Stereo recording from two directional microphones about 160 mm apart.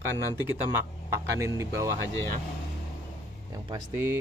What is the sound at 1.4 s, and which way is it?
Speech, 20° right (ahead or behind).